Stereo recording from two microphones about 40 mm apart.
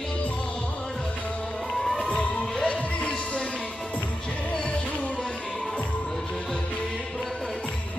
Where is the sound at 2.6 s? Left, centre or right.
Left.